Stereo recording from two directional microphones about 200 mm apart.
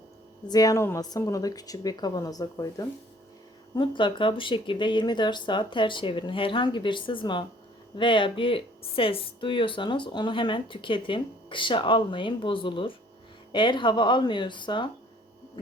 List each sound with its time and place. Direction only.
0.4 s speech: 20° left (ahead or behind)